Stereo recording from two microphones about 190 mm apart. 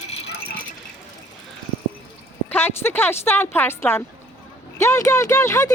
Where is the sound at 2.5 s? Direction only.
10° left (ahead or behind).